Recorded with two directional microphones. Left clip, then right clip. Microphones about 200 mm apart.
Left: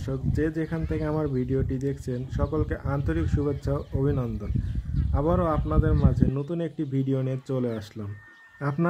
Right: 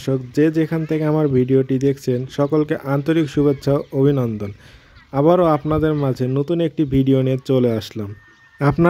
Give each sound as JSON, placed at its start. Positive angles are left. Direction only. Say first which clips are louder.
{"t": 0.0, "sound": "speech", "louder": "right 11 dB", "side_deg": -40}